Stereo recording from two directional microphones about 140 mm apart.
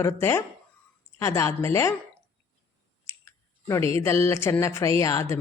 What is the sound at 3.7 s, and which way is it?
Speech, 20° left (ahead or behind).